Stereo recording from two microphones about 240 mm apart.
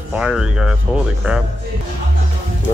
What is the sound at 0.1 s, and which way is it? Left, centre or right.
Speech, centre.